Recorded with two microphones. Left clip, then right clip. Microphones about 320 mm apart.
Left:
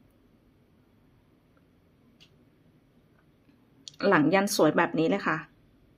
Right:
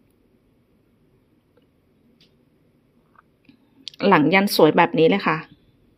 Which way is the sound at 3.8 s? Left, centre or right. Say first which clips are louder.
Right 7 dB; centre.